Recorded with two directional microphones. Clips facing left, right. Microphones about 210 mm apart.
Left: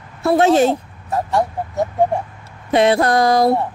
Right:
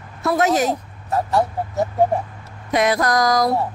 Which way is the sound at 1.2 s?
Centre (ahead or behind).